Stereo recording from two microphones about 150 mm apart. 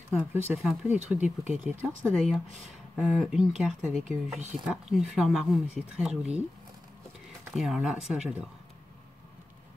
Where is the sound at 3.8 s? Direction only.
55° right (ahead or behind).